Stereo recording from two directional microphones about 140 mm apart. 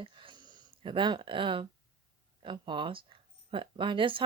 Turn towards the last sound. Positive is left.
turn(degrees=-35)  # may be behind; listen again after turning